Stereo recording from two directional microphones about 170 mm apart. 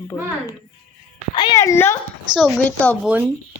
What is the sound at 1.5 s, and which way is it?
Speech, 15° left (ahead or behind).